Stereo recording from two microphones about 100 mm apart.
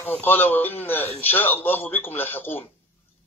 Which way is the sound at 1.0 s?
90° left.